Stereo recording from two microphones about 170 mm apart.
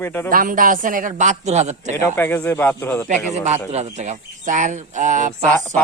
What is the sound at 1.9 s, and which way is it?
Speech, 10° left (ahead or behind).